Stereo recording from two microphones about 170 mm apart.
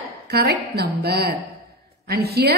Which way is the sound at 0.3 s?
70° right (ahead or behind).